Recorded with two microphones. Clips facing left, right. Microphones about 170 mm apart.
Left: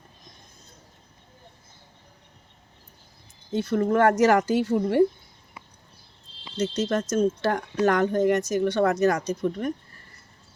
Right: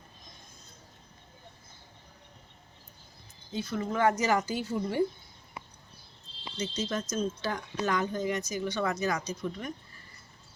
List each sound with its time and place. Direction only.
3.5 s speech: 65° left (ahead or behind)
6.6 s speech: 75° left (ahead or behind); by 9.7 s 55° left (ahead or behind)